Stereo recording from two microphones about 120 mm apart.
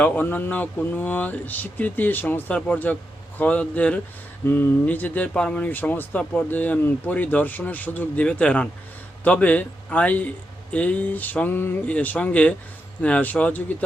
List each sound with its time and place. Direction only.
0.0 s speech: 15° left (ahead or behind)